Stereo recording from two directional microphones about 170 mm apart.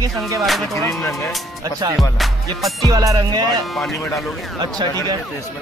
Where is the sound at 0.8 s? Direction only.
15° left (ahead or behind).